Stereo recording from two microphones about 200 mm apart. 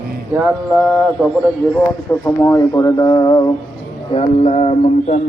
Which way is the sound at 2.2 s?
15° left (ahead or behind).